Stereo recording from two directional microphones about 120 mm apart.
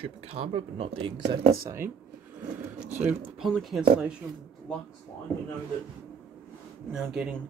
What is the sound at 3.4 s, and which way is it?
Speech, centre (ahead or behind).